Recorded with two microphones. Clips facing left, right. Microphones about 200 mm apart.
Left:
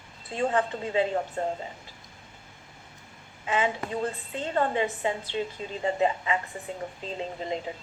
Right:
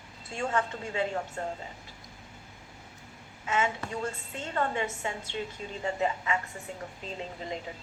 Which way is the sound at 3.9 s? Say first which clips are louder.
Left 4 dB; 35° left (ahead or behind).